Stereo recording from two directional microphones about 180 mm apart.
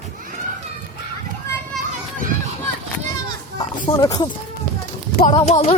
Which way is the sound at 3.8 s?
20° left (ahead or behind).